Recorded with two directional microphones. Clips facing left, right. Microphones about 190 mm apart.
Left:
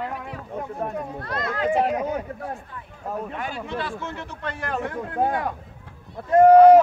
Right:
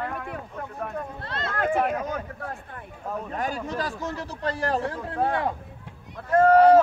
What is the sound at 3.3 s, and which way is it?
Speech, 40° right (ahead or behind).